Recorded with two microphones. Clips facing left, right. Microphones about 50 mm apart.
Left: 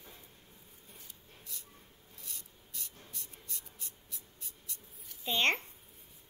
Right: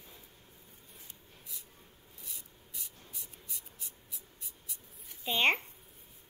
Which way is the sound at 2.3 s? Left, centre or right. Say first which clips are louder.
Even; centre.